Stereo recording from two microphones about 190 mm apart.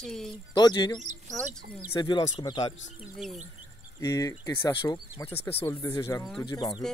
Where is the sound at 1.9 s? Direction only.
25° left (ahead or behind).